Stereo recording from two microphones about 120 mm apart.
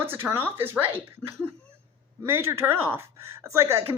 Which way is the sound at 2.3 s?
20° right (ahead or behind).